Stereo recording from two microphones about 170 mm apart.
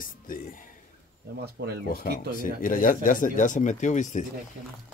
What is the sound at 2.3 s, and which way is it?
Speech, 55° left (ahead or behind).